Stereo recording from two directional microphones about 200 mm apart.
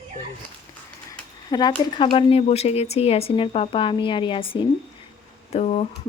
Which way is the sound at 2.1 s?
30° left (ahead or behind).